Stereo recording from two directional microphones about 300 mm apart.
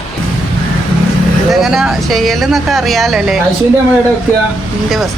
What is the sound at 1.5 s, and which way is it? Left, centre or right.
Speech, centre.